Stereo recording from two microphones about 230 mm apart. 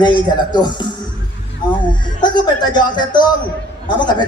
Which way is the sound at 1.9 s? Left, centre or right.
Centre.